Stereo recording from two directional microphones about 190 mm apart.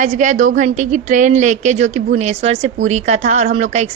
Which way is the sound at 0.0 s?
40° right (ahead or behind).